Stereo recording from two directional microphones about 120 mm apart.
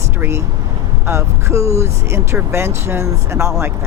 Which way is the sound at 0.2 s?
25° right (ahead or behind).